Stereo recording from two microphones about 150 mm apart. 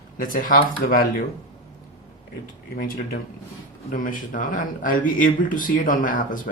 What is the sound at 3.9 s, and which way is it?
Speech, 65° left (ahead or behind).